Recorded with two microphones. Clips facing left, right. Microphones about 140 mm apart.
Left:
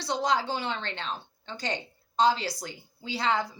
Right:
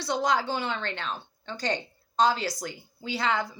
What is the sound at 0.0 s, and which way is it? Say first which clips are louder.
A woman's voice: right 1 dB; 25° left (ahead or behind).